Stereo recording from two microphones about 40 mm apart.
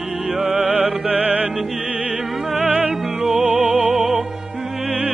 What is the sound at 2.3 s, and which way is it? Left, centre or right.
Music, centre.